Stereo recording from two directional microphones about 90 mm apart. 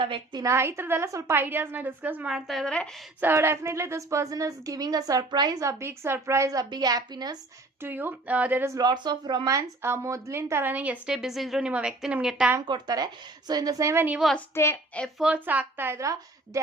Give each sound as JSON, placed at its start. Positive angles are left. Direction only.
{"t": 0.3, "sound": "a woman's voice", "side_deg": -35}
{"t": 2.3, "sound": "a woman's voice", "side_deg": 5}
{"t": 3.2, "sound": "a woman's voice", "side_deg": -25}
{"t": 5.6, "sound": "a woman's voice", "side_deg": -30}
{"t": 7.8, "sound": "a woman's voice", "side_deg": -25}
{"t": 8.8, "sound": "speech", "side_deg": -50}
{"t": 9.8, "sound": "a woman's voice", "side_deg": -30}
{"t": 12.6, "sound": "a woman's voice", "side_deg": -50}
{"t": 14.5, "sound": "a woman's voice", "side_deg": 30}
{"t": 15.4, "sound": "a woman's voice", "side_deg": -20}